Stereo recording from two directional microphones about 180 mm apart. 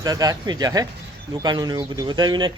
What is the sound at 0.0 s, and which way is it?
Speech, 20° right (ahead or behind).